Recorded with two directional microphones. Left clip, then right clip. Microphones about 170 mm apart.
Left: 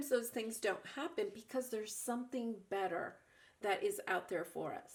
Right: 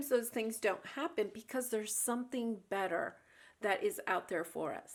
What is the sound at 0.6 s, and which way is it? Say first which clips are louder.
Speech: right 3 dB; 25° right (ahead or behind).